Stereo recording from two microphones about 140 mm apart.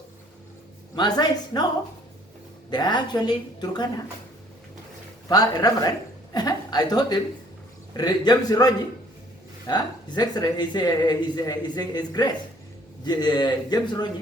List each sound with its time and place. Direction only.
0.9 s speech: 30° left (ahead or behind)
2.6 s speech: 30° left (ahead or behind)
5.3 s a man's voice: 30° left (ahead or behind)